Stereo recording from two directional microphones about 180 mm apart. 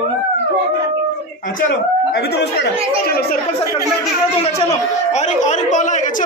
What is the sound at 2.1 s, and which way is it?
A woman's voice, 65° left (ahead or behind).